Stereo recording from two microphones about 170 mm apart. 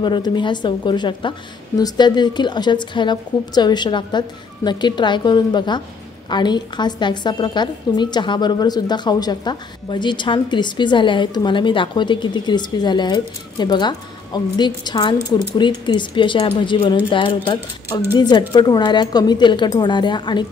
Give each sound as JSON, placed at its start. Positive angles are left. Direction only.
{"t": 0.0, "sound": "a woman's voice", "side_deg": 25}